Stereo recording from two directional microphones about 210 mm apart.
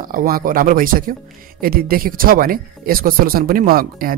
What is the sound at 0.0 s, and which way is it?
Speech, 40° right (ahead or behind).